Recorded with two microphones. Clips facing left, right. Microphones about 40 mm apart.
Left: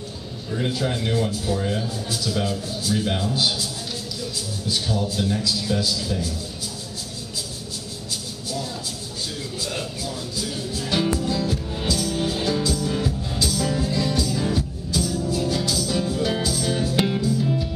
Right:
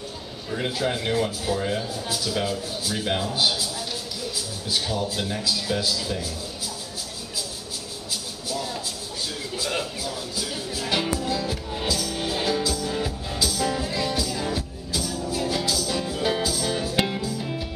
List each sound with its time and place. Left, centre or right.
0.5 s a man's voice: centre
4.6 s a man's voice: right
10.9 s music: centre